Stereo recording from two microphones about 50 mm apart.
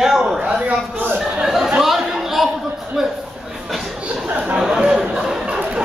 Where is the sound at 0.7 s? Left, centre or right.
Right.